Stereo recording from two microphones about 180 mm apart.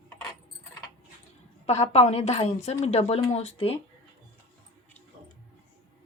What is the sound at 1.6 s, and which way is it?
A woman's voice, 35° left (ahead or behind).